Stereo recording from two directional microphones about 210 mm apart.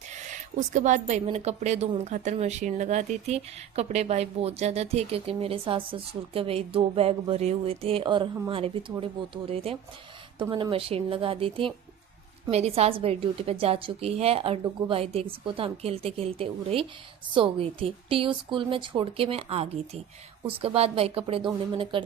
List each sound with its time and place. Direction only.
0.1 s speech: 35° right (ahead or behind)